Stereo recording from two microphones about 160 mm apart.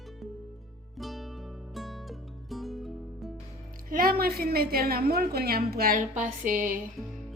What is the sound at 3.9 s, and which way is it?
A woman's voice, 65° right (ahead or behind).